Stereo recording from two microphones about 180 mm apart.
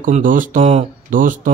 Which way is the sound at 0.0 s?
50° right (ahead or behind).